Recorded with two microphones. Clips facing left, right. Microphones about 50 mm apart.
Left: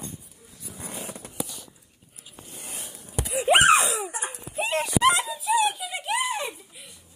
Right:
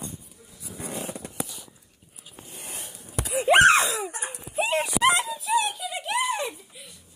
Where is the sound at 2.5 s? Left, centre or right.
Right.